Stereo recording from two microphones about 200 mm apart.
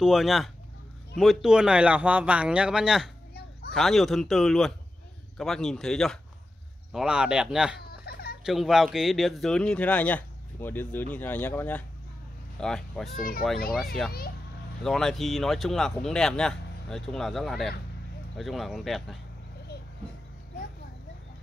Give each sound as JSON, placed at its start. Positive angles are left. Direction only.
{"t": 0.0, "sound": "speech", "side_deg": 0}
{"t": 7.9, "sound": "baby cry", "side_deg": 50}
{"t": 8.5, "sound": "speech", "side_deg": 0}